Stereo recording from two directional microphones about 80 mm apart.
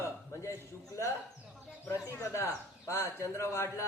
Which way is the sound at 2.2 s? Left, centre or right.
Left.